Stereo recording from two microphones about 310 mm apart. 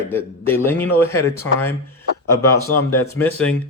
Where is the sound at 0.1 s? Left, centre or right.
Centre.